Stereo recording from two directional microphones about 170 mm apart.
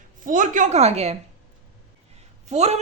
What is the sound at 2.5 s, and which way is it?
Speech, 40° right (ahead or behind).